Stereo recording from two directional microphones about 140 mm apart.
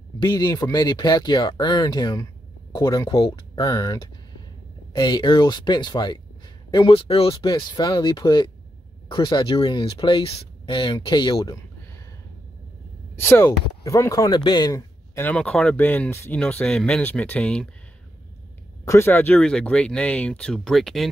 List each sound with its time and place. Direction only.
0.2 s speech: 30° left (ahead or behind)
3.7 s speech: 20° left (ahead or behind)
13.2 s speech: 20° left (ahead or behind)
15.1 s speech: 10° left (ahead or behind)
18.9 s speech: 15° left (ahead or behind)